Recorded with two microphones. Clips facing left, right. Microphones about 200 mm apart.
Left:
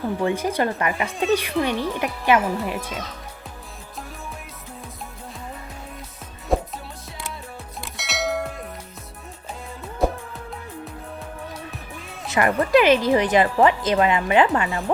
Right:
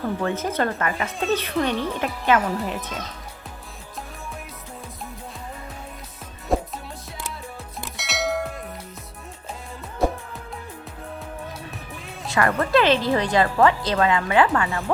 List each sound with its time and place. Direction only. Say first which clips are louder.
0.2 s a woman's voice: left 4 dB; 15° left (ahead or behind)
6.5 s music: left 1 dB; centre (ahead or behind)
7.8 s a sound: even; centre (ahead or behind)
12.2 s speech: left 1 dB; 20° left (ahead or behind)